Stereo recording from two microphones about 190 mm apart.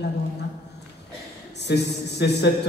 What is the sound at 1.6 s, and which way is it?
Speech, 60° left (ahead or behind).